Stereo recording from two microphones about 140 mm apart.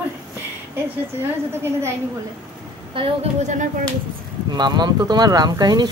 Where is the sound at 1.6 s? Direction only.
20° right (ahead or behind).